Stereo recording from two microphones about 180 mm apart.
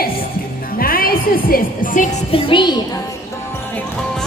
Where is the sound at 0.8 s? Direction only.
55° left (ahead or behind).